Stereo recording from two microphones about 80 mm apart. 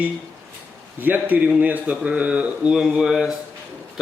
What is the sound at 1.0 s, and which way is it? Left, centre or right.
A man's voice, right.